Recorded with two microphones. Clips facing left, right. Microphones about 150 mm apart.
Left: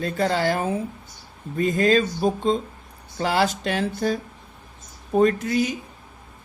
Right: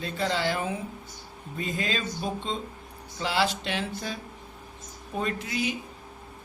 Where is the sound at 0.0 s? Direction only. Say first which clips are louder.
Left 6 dB; 45° left (ahead or behind).